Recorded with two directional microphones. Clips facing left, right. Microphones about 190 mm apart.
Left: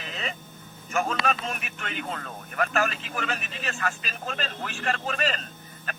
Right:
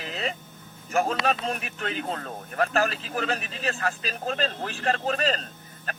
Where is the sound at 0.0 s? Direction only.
35° right (ahead or behind).